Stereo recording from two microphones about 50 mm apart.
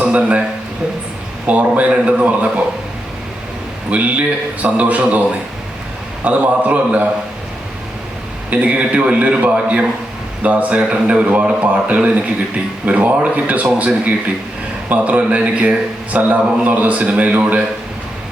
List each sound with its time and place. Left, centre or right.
0.0 s a sound: right
1.5 s a man's voice: right
3.8 s a man's voice: right
8.4 s a man's voice: right
10.8 s a man's voice: right